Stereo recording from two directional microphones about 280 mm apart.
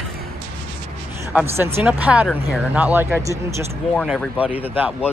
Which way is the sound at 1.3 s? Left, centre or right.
Centre.